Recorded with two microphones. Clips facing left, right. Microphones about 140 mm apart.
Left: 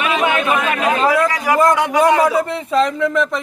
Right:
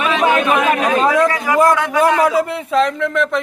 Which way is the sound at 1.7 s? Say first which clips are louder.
Even; 15° left (ahead or behind).